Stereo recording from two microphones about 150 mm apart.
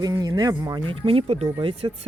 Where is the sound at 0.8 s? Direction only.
35° right (ahead or behind).